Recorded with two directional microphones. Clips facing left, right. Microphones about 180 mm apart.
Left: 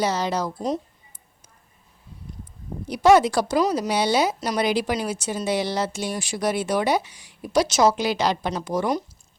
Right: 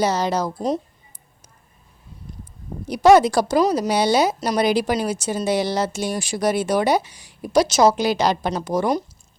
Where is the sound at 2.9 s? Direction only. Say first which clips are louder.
Right 3 dB; 40° right (ahead or behind).